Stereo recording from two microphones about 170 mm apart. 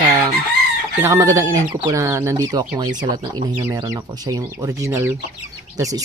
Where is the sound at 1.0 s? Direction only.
15° right (ahead or behind).